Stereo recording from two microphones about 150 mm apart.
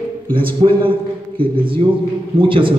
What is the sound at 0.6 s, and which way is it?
Speech, 35° right (ahead or behind).